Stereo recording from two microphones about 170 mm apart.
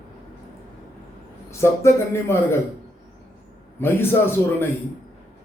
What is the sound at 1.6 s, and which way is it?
Speech, 15° left (ahead or behind).